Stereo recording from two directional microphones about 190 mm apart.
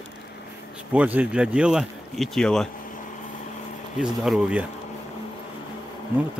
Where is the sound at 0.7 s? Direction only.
5° right (ahead or behind).